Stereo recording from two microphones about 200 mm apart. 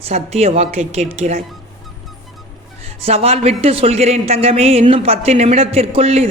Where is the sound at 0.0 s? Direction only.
30° right (ahead or behind).